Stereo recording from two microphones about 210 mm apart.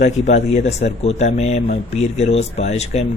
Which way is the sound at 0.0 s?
35° left (ahead or behind).